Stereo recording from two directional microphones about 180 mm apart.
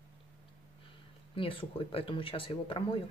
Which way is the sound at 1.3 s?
30° left (ahead or behind).